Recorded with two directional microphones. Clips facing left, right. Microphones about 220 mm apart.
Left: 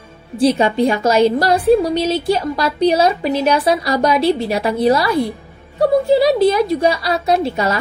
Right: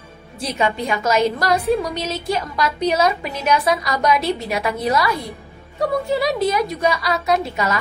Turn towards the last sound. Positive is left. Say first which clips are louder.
# left 4 dB
turn(degrees=30)  # may be behind; listen again after turning